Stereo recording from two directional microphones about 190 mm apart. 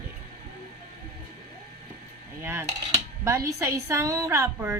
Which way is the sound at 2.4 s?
15° right (ahead or behind).